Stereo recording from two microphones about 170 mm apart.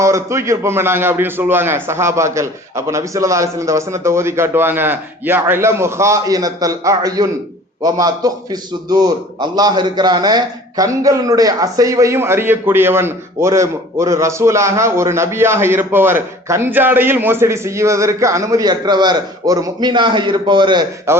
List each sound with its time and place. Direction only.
0.0 s a man's voice: 15° right (ahead or behind)
21.1 s a man's voice: 15° right (ahead or behind)